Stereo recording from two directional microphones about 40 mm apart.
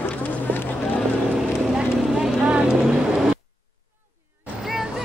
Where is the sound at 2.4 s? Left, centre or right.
Right.